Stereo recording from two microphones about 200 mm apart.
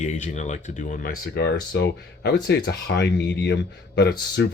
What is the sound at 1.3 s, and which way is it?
Speech, 55° left (ahead or behind).